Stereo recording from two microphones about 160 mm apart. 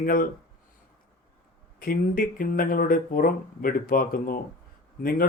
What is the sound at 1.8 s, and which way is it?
Speech, 60° left (ahead or behind).